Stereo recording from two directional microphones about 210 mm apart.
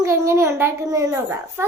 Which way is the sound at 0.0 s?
15° right (ahead or behind).